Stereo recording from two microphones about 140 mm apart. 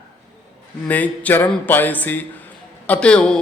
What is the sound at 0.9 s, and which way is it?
A man's voice, 10° left (ahead or behind).